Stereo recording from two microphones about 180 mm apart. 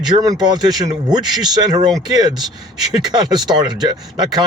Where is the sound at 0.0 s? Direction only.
20° right (ahead or behind).